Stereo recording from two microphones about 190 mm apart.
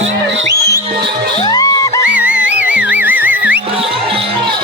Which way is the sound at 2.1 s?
5° right (ahead or behind).